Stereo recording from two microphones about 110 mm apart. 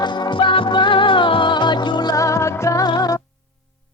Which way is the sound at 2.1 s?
30° left (ahead or behind).